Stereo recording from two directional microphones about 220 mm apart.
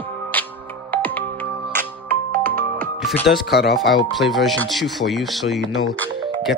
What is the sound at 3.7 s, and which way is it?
Speech, centre (ahead or behind).